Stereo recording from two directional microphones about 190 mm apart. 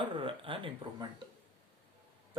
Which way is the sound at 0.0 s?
25° right (ahead or behind).